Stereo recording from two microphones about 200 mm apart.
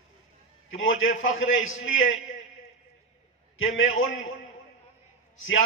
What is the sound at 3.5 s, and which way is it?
Speech, 85° left.